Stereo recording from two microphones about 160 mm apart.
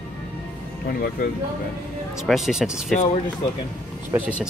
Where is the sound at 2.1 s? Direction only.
Centre (ahead or behind).